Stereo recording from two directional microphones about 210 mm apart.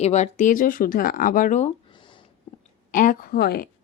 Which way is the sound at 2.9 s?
40° left (ahead or behind).